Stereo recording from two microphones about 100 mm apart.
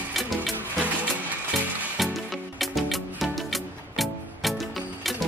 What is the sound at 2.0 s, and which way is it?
Music, centre (ahead or behind).